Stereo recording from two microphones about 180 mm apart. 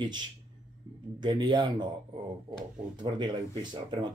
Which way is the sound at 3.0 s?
25° right (ahead or behind).